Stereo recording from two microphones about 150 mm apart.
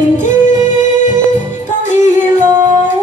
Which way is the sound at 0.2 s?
55° left (ahead or behind).